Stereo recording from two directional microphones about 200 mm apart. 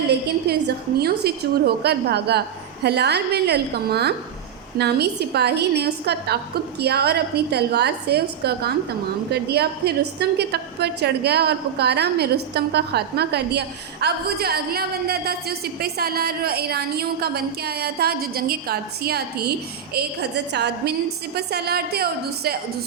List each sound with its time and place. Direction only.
0.5 s a woman's voice: 55° right (ahead or behind)